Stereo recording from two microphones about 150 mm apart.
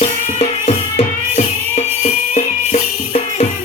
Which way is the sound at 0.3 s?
50° left (ahead or behind).